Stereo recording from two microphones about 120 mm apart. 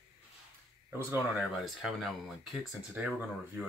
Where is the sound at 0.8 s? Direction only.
15° right (ahead or behind).